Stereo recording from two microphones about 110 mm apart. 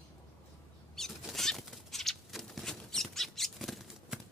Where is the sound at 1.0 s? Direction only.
5° left (ahead or behind).